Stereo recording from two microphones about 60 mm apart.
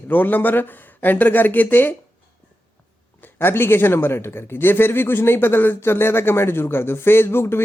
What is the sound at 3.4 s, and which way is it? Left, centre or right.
Speech, left.